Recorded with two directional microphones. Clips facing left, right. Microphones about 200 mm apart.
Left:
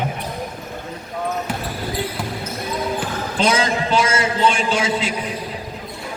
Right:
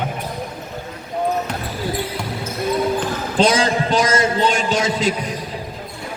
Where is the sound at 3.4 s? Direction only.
35° right (ahead or behind).